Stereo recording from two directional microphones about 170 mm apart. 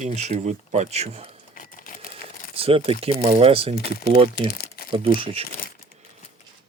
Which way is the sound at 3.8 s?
65° left (ahead or behind).